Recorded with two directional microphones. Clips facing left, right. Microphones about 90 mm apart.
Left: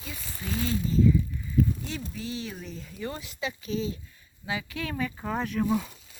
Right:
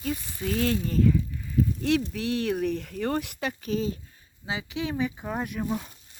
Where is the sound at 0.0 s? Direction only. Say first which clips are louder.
Right 9 dB; 55° right (ahead or behind).